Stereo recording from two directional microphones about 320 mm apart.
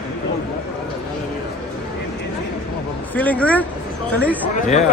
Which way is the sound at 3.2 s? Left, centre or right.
Centre.